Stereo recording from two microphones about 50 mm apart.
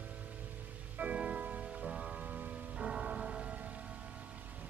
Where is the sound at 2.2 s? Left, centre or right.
Right.